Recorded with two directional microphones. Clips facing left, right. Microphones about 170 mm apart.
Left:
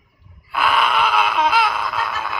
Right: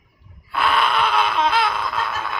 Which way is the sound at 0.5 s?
5° left (ahead or behind).